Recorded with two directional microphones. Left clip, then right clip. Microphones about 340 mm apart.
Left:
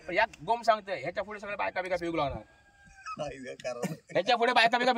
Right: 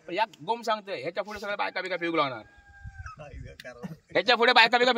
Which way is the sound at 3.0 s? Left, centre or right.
Left.